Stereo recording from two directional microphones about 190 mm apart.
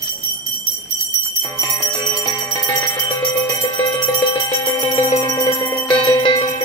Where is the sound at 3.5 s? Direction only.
15° left (ahead or behind).